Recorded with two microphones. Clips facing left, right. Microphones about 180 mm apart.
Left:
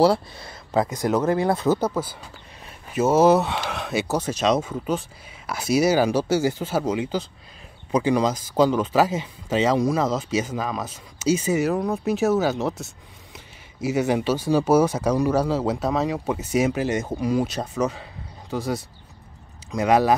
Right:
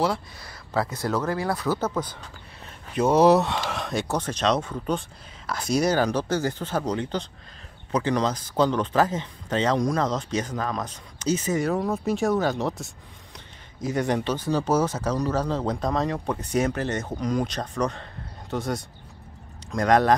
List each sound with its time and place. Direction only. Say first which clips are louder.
0.0 s speech: left 7 dB; 30° left (ahead or behind)
1.8 s speech: left 3 dB; 10° left (ahead or behind)